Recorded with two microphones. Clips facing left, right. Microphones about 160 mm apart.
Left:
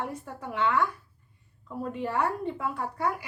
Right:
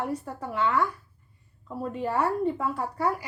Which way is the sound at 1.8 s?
35° right (ahead or behind).